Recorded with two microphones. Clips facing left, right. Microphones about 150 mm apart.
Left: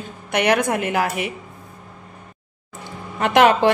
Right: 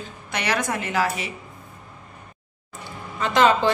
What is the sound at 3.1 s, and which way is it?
Speech, 65° left (ahead or behind).